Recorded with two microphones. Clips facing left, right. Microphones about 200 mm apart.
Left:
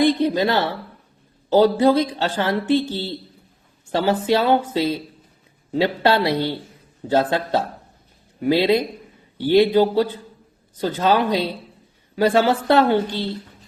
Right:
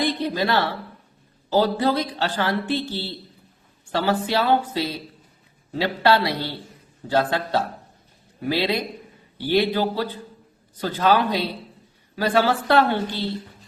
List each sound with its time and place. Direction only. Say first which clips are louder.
0.0 s speech: left 6 dB; 20° left (ahead or behind)
4.0 s speech: left 4 dB; 20° left (ahead or behind)